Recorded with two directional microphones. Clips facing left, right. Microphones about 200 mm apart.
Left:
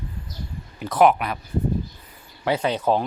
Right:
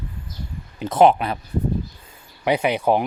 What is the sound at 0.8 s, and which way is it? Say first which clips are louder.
Speech: right 2 dB; 25° right (ahead or behind).